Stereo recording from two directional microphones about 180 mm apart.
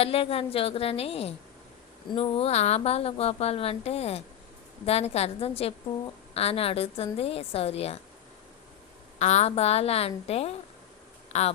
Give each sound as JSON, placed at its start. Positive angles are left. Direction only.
{"t": 0.0, "sound": "a woman's voice", "side_deg": 35}
{"t": 9.1, "sound": "a woman's voice", "side_deg": 40}